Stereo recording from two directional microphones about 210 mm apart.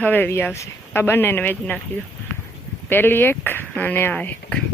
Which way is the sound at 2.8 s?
10° left (ahead or behind).